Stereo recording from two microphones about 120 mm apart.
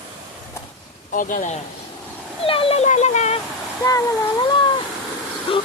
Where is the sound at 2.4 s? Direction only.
50° left (ahead or behind); by 3.4 s 70° left (ahead or behind).